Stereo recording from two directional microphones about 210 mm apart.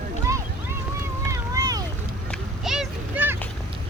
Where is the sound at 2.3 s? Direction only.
Centre (ahead or behind).